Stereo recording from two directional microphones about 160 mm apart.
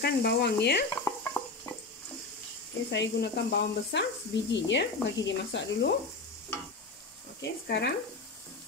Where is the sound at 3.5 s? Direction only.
90° left.